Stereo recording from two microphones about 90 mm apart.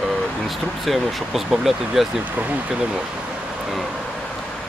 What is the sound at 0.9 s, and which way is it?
Speech, centre (ahead or behind).